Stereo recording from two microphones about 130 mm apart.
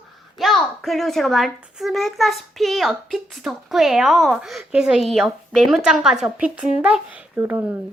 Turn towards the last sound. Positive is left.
turn(degrees=-10)  # may be behind; listen again after turning